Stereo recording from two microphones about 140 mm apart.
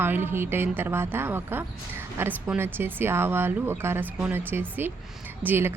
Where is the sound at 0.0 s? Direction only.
15° right (ahead or behind).